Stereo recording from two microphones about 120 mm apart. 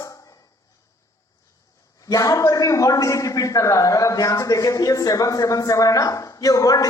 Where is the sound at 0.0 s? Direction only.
30° left (ahead or behind).